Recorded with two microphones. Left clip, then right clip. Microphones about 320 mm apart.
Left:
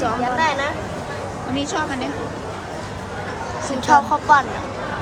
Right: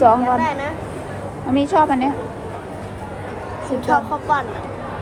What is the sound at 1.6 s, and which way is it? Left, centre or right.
Speech, centre.